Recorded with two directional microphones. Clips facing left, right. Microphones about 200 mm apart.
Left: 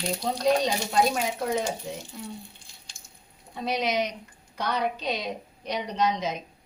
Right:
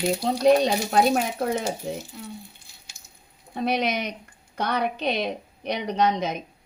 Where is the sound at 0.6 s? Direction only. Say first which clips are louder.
Right 4 dB; 60° right (ahead or behind).